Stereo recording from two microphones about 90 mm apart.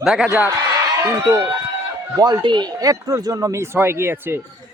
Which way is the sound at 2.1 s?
45° right (ahead or behind).